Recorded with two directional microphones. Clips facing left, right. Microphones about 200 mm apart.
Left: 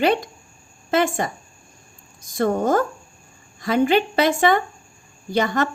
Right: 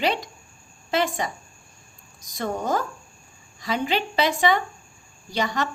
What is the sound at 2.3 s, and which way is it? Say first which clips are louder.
A woman's voice: left 7 dB; 50° left (ahead or behind).